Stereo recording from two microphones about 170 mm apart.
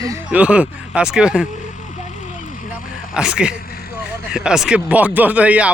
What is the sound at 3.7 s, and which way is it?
Vehicle, 65° left (ahead or behind).